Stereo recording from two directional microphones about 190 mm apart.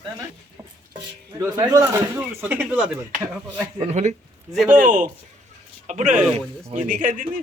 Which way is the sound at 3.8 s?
35° right (ahead or behind).